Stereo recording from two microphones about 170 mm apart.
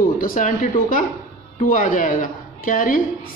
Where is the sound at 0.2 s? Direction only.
55° left (ahead or behind).